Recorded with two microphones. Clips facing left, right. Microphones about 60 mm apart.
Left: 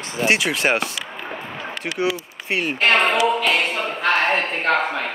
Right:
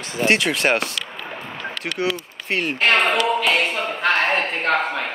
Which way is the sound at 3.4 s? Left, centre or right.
Centre.